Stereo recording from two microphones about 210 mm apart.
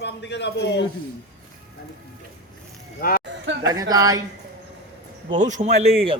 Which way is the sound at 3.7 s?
15° right (ahead or behind).